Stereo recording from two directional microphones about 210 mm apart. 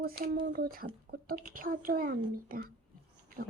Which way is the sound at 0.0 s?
45° right (ahead or behind).